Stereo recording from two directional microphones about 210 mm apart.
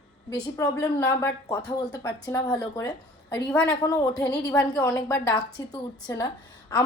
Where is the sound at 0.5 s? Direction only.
15° left (ahead or behind).